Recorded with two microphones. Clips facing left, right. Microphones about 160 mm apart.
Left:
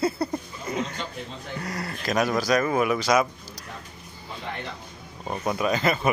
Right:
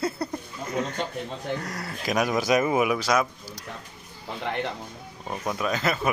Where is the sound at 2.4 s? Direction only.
20° right (ahead or behind); by 3.3 s centre (ahead or behind).